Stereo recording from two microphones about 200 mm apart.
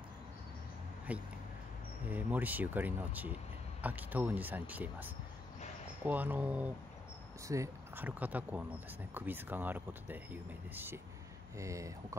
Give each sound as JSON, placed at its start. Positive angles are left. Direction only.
{"t": 1.1, "sound": "speech", "side_deg": -5}